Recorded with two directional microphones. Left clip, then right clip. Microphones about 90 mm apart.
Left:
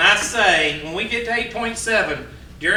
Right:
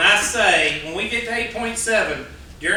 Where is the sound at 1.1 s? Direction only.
20° left (ahead or behind).